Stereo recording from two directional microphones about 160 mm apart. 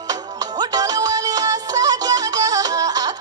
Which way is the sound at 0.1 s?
25° right (ahead or behind).